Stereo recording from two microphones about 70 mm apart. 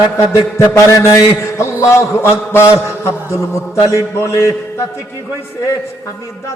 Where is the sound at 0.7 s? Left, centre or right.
Left.